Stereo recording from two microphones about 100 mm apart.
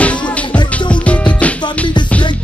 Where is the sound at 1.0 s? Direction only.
15° left (ahead or behind).